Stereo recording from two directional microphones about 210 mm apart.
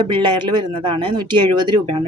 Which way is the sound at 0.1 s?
25° right (ahead or behind).